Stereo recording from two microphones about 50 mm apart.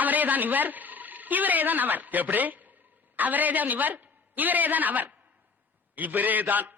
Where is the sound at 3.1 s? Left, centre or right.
Right.